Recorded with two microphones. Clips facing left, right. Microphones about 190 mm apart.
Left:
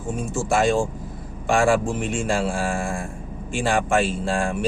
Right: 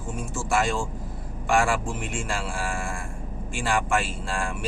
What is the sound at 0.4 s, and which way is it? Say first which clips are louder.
Speech: left 5 dB; 20° left (ahead or behind).